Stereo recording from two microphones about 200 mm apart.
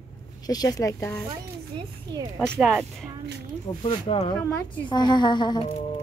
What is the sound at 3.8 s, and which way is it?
A woman's voice, 30° left (ahead or behind).